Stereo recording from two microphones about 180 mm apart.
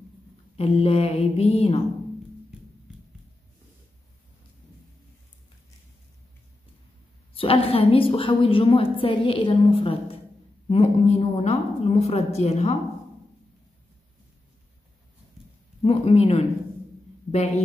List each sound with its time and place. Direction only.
0.6 s a woman's voice: 35° left (ahead or behind)
7.3 s a woman's voice: 30° left (ahead or behind)
15.8 s a woman's voice: 35° left (ahead or behind)